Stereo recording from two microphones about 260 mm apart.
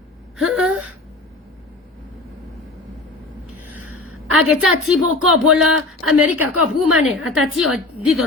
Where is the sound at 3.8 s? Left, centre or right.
Right.